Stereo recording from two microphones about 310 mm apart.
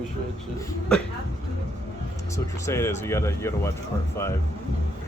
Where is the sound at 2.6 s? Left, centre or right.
Centre.